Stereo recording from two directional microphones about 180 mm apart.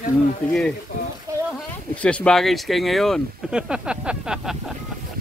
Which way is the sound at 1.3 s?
15° right (ahead or behind).